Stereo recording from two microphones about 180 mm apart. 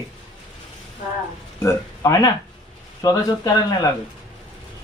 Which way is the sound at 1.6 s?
20° left (ahead or behind).